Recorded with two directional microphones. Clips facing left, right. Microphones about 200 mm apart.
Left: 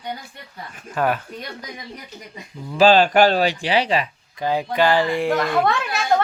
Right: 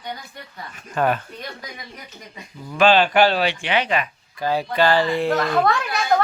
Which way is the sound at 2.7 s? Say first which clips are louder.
Left 2 dB; 35° left (ahead or behind).